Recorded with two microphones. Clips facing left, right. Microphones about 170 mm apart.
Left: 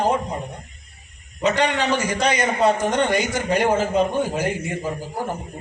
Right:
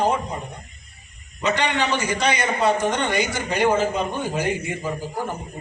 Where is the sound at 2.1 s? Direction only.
40° left (ahead or behind).